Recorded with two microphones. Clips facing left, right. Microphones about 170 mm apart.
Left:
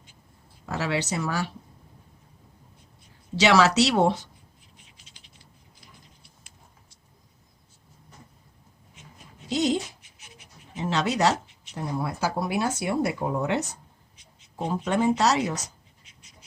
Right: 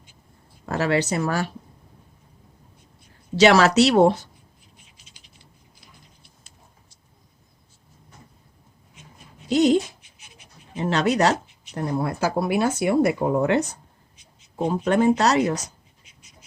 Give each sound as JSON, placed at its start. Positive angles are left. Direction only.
{"t": 0.6, "sound": "speech", "side_deg": -55}
{"t": 3.4, "sound": "speech", "side_deg": -50}
{"t": 9.5, "sound": "speech", "side_deg": -60}
{"t": 10.8, "sound": "speech", "side_deg": -55}
{"t": 14.8, "sound": "speech", "side_deg": -55}